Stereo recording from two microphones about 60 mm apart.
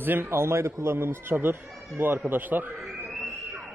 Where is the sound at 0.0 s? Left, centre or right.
Right.